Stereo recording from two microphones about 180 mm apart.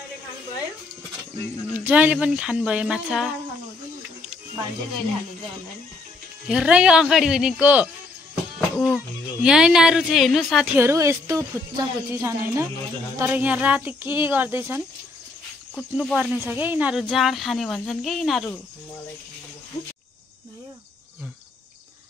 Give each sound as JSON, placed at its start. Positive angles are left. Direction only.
{"t": 1.7, "sound": "speech", "side_deg": -10}
{"t": 6.5, "sound": "speech", "side_deg": -5}
{"t": 10.8, "sound": "speech", "side_deg": -15}
{"t": 15.7, "sound": "speech", "side_deg": 5}
{"t": 16.2, "sound": "speech", "side_deg": -5}